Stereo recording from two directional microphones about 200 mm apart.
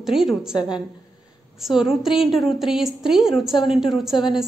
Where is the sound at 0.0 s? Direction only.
Centre (ahead or behind).